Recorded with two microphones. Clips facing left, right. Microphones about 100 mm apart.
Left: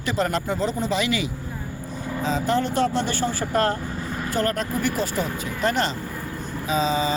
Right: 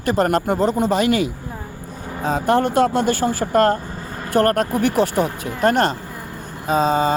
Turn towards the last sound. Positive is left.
turn(degrees=-55)  # may be behind; listen again after turning